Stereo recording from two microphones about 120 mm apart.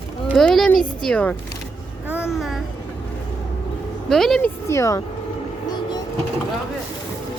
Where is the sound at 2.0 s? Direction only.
10° right (ahead or behind).